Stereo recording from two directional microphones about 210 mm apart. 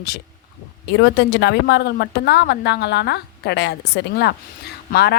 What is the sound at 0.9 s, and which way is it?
A woman's voice, 55° left (ahead or behind).